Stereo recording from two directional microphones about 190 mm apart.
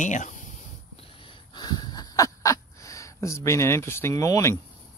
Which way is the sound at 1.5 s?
25° left (ahead or behind).